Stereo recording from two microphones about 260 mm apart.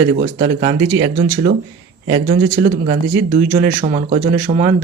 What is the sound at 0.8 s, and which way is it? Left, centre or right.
Speech, right.